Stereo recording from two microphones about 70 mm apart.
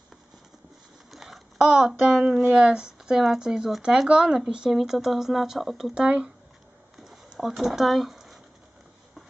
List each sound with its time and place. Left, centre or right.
1.1 s a sound: centre
2.2 s speech: centre
5.9 s speech: centre
7.3 s speech: centre